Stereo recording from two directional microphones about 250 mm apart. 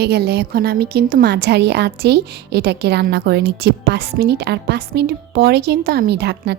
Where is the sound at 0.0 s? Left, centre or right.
Right.